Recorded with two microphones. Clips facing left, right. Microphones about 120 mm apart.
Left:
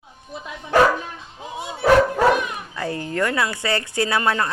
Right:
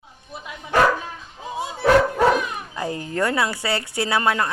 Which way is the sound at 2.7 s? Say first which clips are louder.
Left 1 dB; 20° right (ahead or behind).